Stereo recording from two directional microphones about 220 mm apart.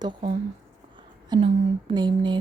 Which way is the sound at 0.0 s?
20° right (ahead or behind).